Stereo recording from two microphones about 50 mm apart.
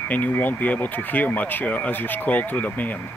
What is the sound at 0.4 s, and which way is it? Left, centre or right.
Speech, left.